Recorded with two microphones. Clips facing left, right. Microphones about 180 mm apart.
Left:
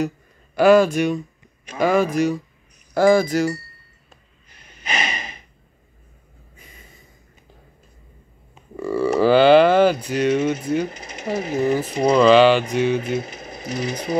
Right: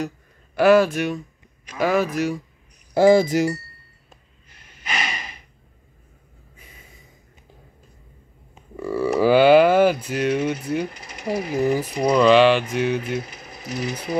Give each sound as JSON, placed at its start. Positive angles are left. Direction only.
{"t": 0.6, "sound": "speech", "side_deg": -5}
{"t": 2.9, "sound": "speech", "side_deg": -20}
{"t": 4.5, "sound": "snort", "side_deg": 20}
{"t": 6.5, "sound": "a sound", "side_deg": -5}
{"t": 8.7, "sound": "speech", "side_deg": -5}
{"t": 10.9, "sound": "speech", "side_deg": 20}
{"t": 12.2, "sound": "speech", "side_deg": 0}
{"t": 13.2, "sound": "speech", "side_deg": 25}